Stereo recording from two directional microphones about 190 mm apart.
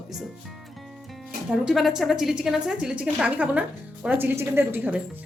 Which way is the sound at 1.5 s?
Centre (ahead or behind).